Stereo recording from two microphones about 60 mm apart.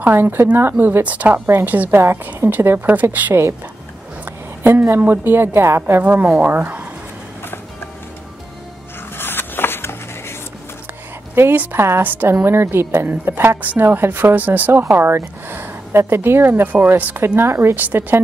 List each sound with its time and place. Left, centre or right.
0.0 s speech: right
1.5 s a woman's voice: right
4.2 s a sound: right
5.0 s speech: right
9.1 s a sound: left
11.7 s a woman's voice: right
12.1 s speech: right
12.4 s a woman's voice: right
17.4 s a woman's voice: right